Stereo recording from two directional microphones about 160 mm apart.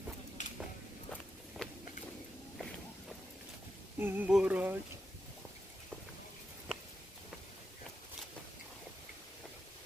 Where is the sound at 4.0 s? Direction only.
10° right (ahead or behind).